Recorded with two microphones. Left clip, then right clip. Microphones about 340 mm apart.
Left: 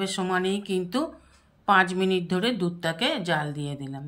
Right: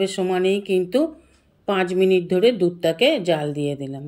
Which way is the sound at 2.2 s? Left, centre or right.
Left.